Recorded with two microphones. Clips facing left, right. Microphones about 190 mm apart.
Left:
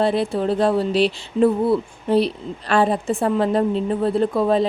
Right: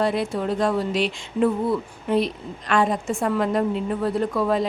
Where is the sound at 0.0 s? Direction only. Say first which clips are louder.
Left 3 dB; 30° left (ahead or behind).